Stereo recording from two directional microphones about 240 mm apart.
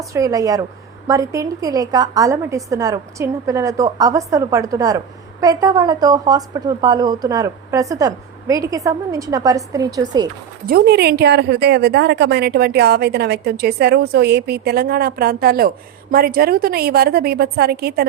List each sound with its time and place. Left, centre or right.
0.0 s speech: centre
10.7 s a woman's voice: right